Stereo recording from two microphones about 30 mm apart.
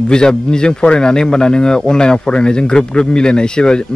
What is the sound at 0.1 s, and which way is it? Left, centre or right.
Speech, left.